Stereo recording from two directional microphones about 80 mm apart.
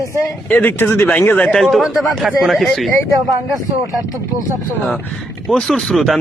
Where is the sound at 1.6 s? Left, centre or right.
Centre.